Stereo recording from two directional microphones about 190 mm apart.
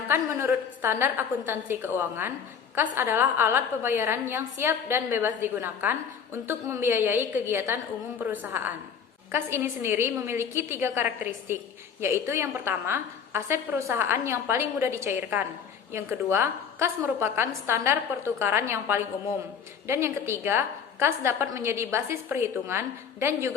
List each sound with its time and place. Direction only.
0.1 s a woman's voice: 10° right (ahead or behind)